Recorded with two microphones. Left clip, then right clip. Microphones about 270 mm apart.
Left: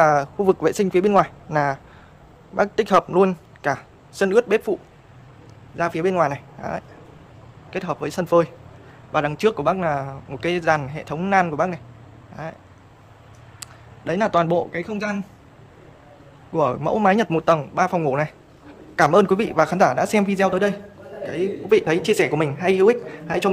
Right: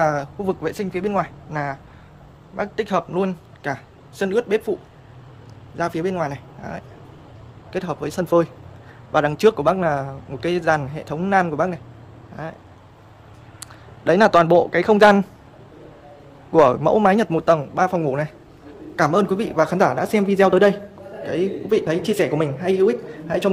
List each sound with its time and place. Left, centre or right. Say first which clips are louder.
0.0 s speech: left 4 dB; centre
5.8 s a man's voice: left 3 dB; centre
13.6 s speech: even; centre
16.5 s a man's voice: right 6 dB; centre